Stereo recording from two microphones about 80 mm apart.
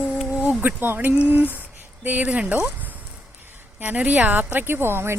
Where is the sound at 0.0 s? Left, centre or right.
Centre.